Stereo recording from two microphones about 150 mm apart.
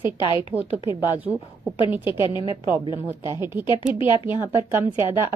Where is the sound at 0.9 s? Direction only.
15° right (ahead or behind).